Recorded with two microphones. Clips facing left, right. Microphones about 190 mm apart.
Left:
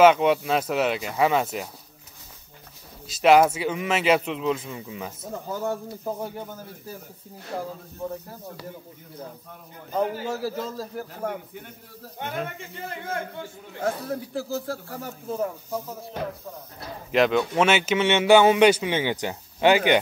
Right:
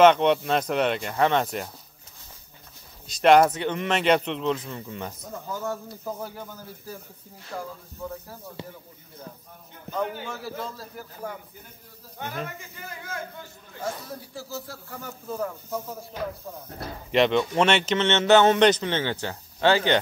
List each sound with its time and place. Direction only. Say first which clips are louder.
0.0 s speech: even; 5° left (ahead or behind)
3.1 s speech: even; 5° left (ahead or behind)
5.2 s a man's voice: left 5 dB; 25° left (ahead or behind)
6.1 s a man's voice: left 3 dB; 20° left (ahead or behind)
7.5 s a man's voice: left 3 dB; 35° left (ahead or behind)
10.2 s a man's voice: left 5 dB; 40° left (ahead or behind)
11.1 s speech: left 4 dB; 70° left (ahead or behind)
13.7 s speech: left 6 dB; 60° left (ahead or behind)
15.0 s a man's voice: left 2 dB; 25° left (ahead or behind)
17.1 s a man's voice: even; centre (ahead or behind)